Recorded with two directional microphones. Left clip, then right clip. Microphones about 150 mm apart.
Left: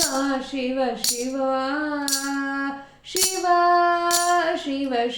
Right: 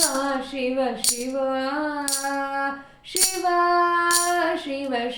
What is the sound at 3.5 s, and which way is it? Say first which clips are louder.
Music: left 1 dB; 30° left (ahead or behind).